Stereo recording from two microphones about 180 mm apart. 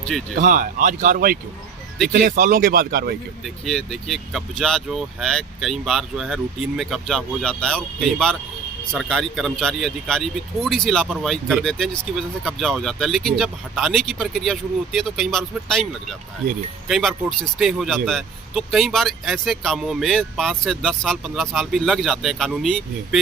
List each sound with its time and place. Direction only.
0.0 s speech: 5° left (ahead or behind)
0.3 s speech: 45° right (ahead or behind)
3.4 s speech: centre (ahead or behind)